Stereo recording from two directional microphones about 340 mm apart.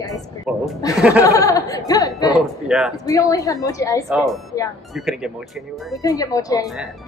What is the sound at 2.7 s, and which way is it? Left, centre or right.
Speech, centre.